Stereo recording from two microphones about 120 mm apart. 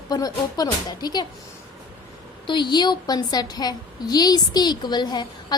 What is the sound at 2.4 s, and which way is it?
A woman's voice, 40° left (ahead or behind).